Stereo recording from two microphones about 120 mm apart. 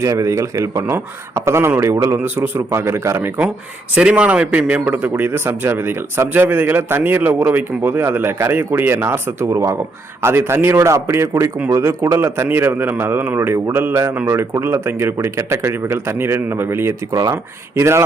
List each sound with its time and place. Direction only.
0.0 s a man's voice: 25° right (ahead or behind)
3.9 s a man's voice: 10° right (ahead or behind)